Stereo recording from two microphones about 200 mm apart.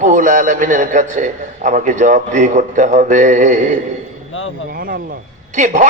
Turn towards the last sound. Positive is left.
turn(degrees=-40)  # may be behind; listen again after turning